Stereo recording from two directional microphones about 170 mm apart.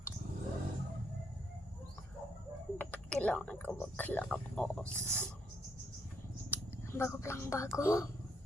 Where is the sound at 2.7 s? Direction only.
10° left (ahead or behind).